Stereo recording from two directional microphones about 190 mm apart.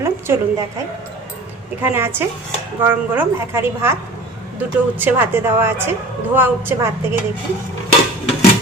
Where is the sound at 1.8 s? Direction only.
10° right (ahead or behind).